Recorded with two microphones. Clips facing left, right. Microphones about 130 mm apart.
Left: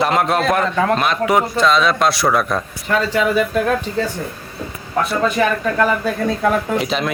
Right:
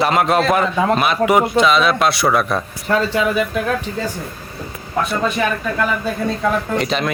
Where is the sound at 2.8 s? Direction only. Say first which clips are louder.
Right 1 dB; 30° right (ahead or behind).